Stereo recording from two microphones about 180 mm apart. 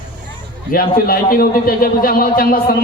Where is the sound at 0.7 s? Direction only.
50° left (ahead or behind).